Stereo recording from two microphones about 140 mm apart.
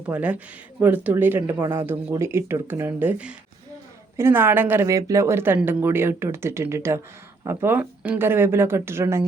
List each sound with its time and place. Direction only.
0.0 s speech: 10° right (ahead or behind)